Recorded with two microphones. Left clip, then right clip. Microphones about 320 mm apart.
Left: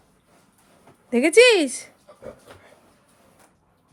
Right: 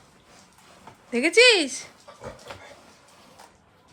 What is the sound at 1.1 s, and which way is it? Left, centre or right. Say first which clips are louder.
Speech: left 3 dB; centre.